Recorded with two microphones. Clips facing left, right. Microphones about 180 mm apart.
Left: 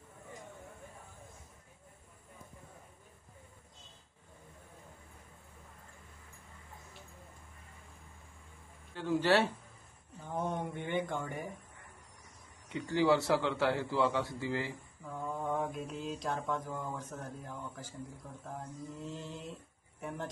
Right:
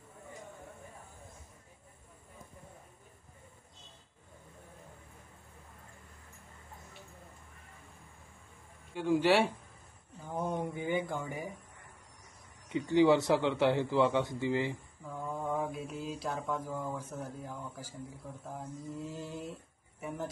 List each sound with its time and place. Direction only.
9.2 s mantra: 10° right (ahead or behind)
10.3 s speech: 5° right (ahead or behind)
12.6 s a man's voice: 20° right (ahead or behind)
15.0 s mantra: 5° right (ahead or behind)
20.0 s speech: 5° right (ahead or behind)